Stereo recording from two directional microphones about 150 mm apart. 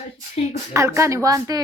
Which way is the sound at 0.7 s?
20° right (ahead or behind).